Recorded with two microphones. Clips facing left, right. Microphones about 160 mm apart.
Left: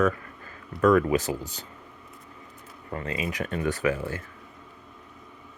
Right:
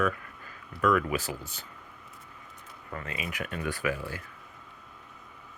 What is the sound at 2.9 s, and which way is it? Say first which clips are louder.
Speech: left 6 dB; 30° left (ahead or behind).